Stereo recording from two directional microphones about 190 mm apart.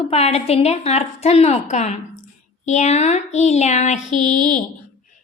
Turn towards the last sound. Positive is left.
turn(degrees=40)  # may be behind; listen again after turning